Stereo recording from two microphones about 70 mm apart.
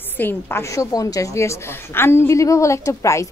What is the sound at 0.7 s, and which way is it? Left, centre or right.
Speech, left.